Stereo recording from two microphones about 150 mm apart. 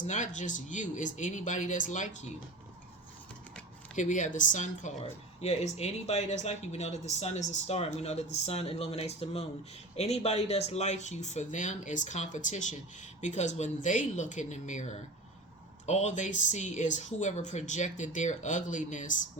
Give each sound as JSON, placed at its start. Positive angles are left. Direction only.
{"t": 0.1, "sound": "speech", "side_deg": 55}
{"t": 3.9, "sound": "speech", "side_deg": 55}
{"t": 15.9, "sound": "speech", "side_deg": 50}